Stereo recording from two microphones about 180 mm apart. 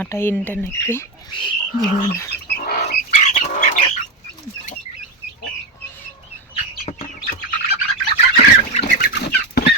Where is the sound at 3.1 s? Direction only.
40° left (ahead or behind).